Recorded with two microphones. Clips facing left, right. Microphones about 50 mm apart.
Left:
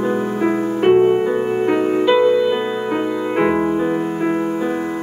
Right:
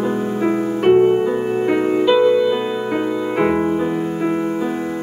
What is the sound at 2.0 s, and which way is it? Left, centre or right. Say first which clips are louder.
Music: even; centre.